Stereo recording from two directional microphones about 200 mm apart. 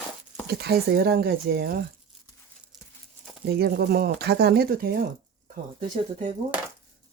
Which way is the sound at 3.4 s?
50° right (ahead or behind).